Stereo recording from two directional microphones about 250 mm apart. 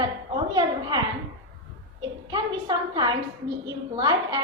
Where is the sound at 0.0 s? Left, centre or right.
Centre.